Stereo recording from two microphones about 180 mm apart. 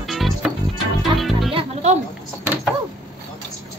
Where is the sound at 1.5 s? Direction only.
40° right (ahead or behind).